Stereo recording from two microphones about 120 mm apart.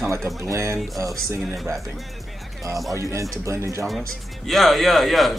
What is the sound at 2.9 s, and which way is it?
Speech, 25° right (ahead or behind).